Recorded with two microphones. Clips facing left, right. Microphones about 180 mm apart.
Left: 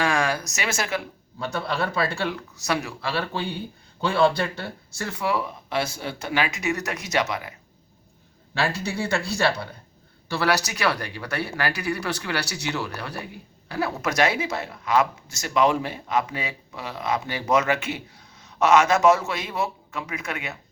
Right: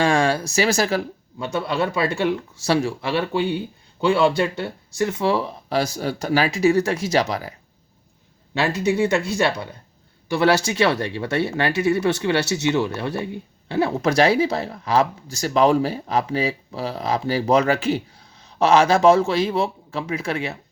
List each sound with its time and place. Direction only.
0.0 s speech: 30° right (ahead or behind)
1.5 s speech: 20° right (ahead or behind); by 7.5 s 35° right (ahead or behind)
8.5 s speech: 20° right (ahead or behind)